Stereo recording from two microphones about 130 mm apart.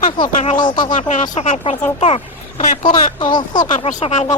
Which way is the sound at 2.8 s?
40° left (ahead or behind).